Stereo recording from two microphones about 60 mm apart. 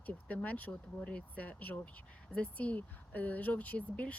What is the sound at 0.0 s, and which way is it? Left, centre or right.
Speech, left.